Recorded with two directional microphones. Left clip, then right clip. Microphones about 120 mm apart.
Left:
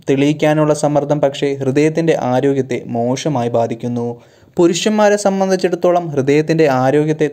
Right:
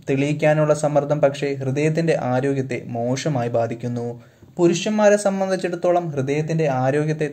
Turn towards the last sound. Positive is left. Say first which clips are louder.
# left 7 dB
turn(degrees=30)  # may be behind; listen again after turning